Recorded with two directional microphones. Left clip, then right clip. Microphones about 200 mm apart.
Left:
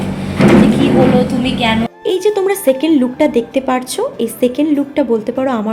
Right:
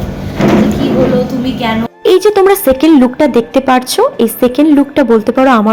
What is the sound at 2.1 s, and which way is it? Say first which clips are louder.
A woman's voice: right 7 dB; 20° right (ahead or behind).